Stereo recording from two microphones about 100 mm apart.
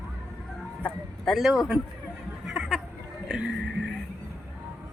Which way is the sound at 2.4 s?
5° right (ahead or behind).